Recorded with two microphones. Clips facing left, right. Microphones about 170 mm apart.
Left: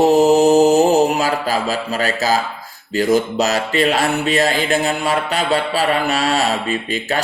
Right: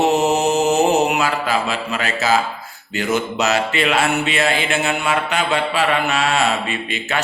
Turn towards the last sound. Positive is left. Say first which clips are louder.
# left 3 dB
turn(degrees=40)  # may be behind; listen again after turning